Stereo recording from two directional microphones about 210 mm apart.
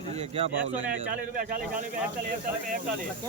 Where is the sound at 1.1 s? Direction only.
45° right (ahead or behind).